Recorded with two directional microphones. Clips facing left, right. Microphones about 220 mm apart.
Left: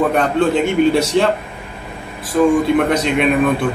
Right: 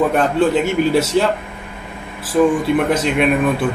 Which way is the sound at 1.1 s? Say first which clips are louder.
Left 1 dB; 5° right (ahead or behind).